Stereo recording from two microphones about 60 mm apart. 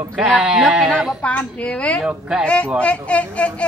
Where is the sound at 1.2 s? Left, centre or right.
Left.